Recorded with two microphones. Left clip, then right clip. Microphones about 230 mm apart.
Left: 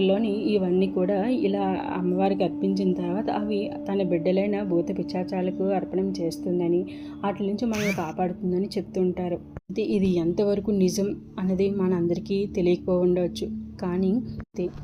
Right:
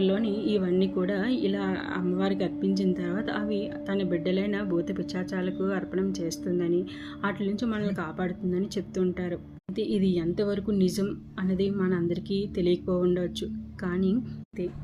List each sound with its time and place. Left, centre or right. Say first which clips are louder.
0.0 s a woman's voice: left 4 dB; centre
7.6 s a woman's voice: left 4 dB; centre